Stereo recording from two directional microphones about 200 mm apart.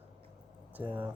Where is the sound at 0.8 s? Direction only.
10° right (ahead or behind).